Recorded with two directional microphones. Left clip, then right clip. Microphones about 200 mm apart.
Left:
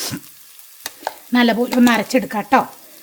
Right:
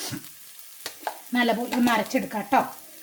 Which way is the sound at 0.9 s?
50° left (ahead or behind).